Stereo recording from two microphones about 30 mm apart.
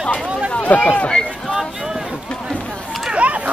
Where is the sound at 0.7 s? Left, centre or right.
Left.